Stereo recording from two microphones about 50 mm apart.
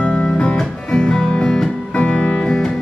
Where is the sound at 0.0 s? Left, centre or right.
Centre.